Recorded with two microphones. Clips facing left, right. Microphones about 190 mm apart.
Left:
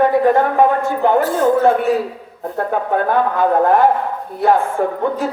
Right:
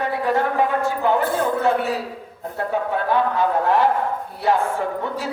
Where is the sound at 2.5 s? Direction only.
50° left (ahead or behind).